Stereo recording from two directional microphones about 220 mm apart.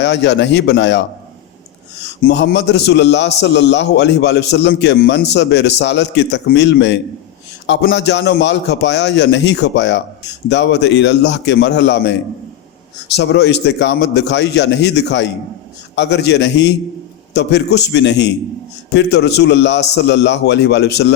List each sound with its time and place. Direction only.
0.0 s a man's voice: 50° left (ahead or behind)
2.2 s a man's voice: 50° left (ahead or behind)
13.1 s a man's voice: 50° left (ahead or behind)